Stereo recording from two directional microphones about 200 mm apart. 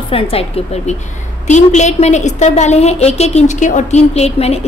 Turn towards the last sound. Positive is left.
turn(degrees=30)  # may be behind; listen again after turning